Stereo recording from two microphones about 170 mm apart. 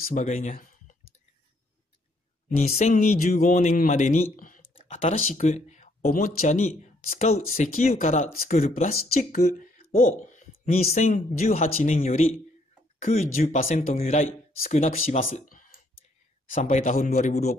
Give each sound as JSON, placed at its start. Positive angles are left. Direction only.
{"t": 0.1, "sound": "speech", "side_deg": 45}
{"t": 2.5, "sound": "speech", "side_deg": 45}
{"t": 3.8, "sound": "a sound", "side_deg": 50}
{"t": 5.4, "sound": "speech", "side_deg": 45}
{"t": 15.4, "sound": "clicking", "side_deg": 55}
{"t": 16.4, "sound": "speech", "side_deg": 50}